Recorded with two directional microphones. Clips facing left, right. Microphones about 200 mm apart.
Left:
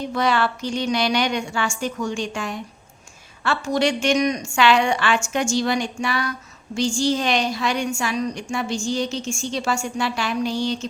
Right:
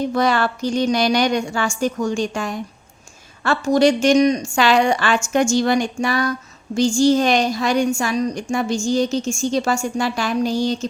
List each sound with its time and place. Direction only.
0.1 s a woman's voice: 45° right (ahead or behind)